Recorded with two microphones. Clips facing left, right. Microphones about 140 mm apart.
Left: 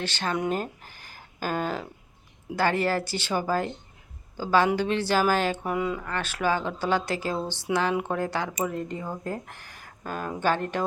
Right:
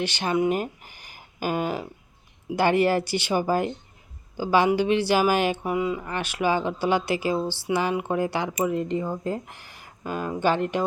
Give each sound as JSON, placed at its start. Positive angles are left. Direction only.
{"t": 0.0, "sound": "speech", "side_deg": -15}